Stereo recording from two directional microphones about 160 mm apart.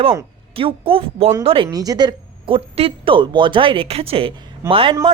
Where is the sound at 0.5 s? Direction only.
35° right (ahead or behind).